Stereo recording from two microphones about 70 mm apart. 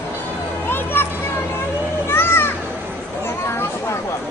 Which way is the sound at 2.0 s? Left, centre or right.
Left.